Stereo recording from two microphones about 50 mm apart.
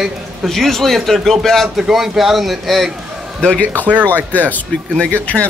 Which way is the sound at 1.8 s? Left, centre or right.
Centre.